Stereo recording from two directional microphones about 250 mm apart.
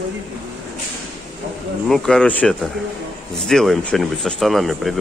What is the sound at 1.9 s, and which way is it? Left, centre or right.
Speech, centre.